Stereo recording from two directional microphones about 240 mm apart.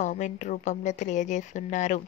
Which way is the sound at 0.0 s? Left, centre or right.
Left.